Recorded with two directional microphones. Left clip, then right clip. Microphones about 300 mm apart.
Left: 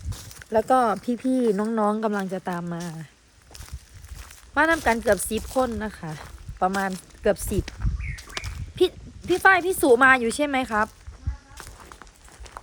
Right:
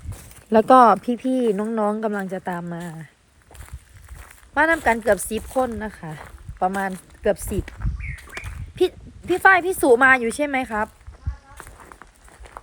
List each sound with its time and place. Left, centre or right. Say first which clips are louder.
0.5 s speech: right 7 dB; centre
0.9 s speech: right 2 dB; centre
4.2 s speech: right 2 dB; centre
11.5 s run: right 1 dB; centre